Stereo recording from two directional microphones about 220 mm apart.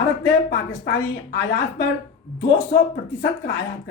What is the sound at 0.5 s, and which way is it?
Speech, 50° left (ahead or behind).